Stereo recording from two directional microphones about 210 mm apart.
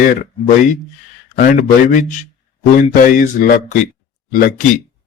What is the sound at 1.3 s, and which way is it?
Speech, 40° left (ahead or behind).